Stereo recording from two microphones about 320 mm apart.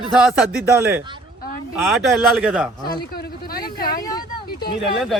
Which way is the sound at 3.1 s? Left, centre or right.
Left.